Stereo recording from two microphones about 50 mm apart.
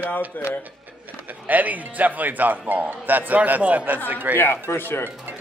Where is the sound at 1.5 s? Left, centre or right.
Right.